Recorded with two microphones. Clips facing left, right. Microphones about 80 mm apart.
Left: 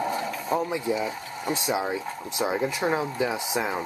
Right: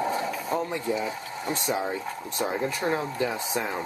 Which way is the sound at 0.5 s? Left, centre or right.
Centre.